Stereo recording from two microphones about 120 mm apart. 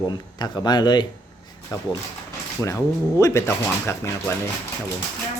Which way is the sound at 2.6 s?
25° left (ahead or behind).